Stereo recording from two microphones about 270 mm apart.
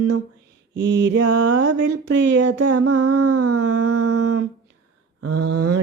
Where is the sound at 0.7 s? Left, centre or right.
Right.